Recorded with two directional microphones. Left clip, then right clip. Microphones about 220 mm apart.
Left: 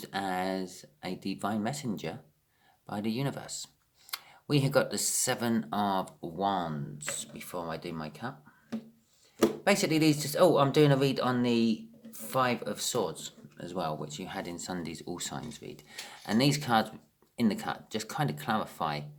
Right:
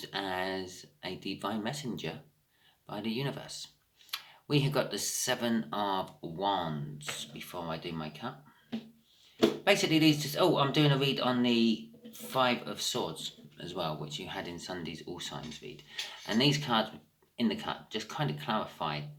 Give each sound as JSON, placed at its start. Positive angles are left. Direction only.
{"t": 0.0, "sound": "speech", "side_deg": 50}
{"t": 9.6, "sound": "speech", "side_deg": 50}